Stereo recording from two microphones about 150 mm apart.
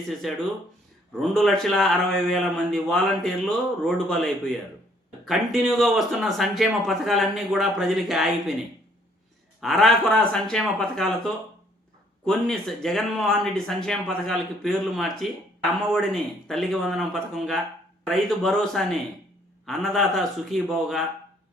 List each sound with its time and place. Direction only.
0.1 s speech: centre (ahead or behind)
9.6 s speech: centre (ahead or behind)
12.2 s speech: 5° left (ahead or behind)